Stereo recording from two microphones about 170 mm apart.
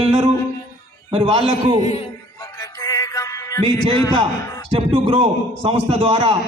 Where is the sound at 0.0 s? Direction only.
35° right (ahead or behind).